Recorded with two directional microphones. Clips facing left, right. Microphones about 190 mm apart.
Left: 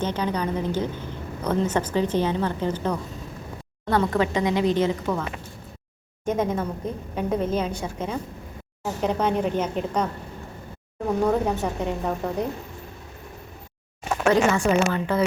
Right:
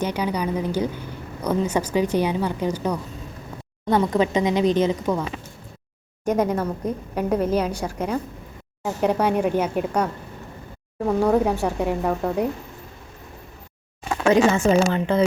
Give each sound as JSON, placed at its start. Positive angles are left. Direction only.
{"t": 0.0, "sound": "a woman's voice", "side_deg": -10}
{"t": 11.2, "sound": "a woman's voice", "side_deg": -10}
{"t": 14.3, "sound": "a woman's voice", "side_deg": -20}